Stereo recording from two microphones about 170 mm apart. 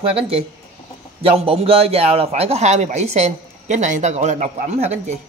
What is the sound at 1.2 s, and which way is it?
A man's voice, 35° right (ahead or behind).